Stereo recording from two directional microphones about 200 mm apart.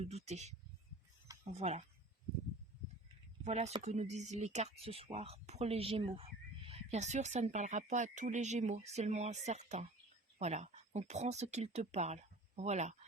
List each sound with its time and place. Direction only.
0.1 s speech: 35° right (ahead or behind)
1.5 s speech: 35° right (ahead or behind)
3.4 s speech: 35° right (ahead or behind)